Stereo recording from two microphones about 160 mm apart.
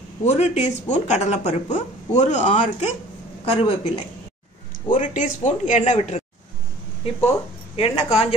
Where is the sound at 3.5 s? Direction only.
35° left (ahead or behind).